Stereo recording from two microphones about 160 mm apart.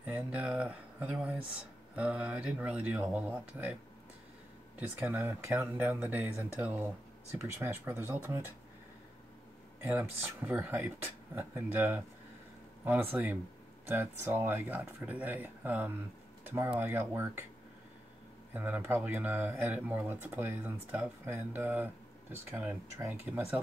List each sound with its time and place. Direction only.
0.0 s speech: 10° right (ahead or behind)
4.7 s speech: 10° right (ahead or behind)
9.8 s speech: 10° right (ahead or behind)
18.5 s speech: 10° right (ahead or behind)